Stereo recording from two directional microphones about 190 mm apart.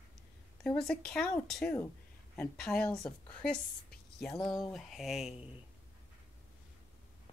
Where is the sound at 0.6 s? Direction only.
5° left (ahead or behind).